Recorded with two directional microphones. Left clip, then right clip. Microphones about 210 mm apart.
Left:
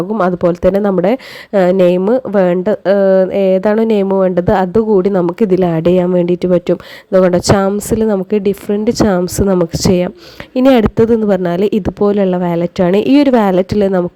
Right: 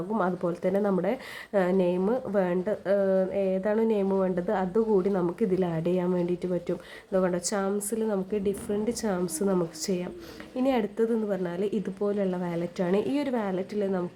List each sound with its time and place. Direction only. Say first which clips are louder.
0.2 s a woman's voice: left 17 dB; 40° left (ahead or behind)